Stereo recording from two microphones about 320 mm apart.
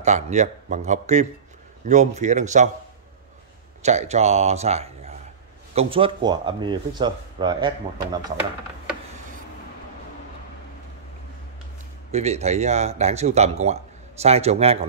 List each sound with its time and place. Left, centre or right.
0.0 s speech: right
3.8 s speech: right
12.1 s speech: centre